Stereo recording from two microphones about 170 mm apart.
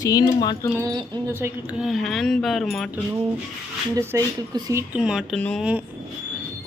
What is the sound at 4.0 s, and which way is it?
Speech, 15° right (ahead or behind).